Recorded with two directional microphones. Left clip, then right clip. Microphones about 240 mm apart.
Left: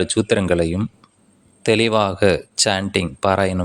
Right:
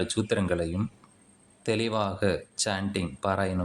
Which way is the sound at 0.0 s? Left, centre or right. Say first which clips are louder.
Left 10 dB; left.